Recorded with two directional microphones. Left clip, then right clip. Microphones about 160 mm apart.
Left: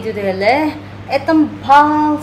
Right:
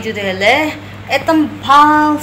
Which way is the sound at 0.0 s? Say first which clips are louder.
Right 1 dB; 10° left (ahead or behind).